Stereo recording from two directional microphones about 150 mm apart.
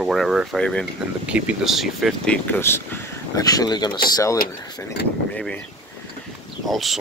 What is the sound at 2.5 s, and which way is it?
Speech, 15° left (ahead or behind).